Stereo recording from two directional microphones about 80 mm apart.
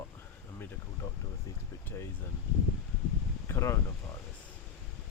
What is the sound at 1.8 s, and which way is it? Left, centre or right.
Speech, left.